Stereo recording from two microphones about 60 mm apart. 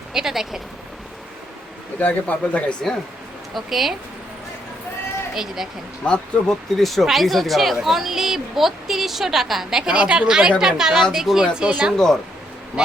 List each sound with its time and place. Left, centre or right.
0.1 s speech: centre
2.0 s speech: left
3.5 s speech: centre
5.3 s speech: centre
6.0 s speech: centre
6.5 s speech: centre
11.9 s speech: centre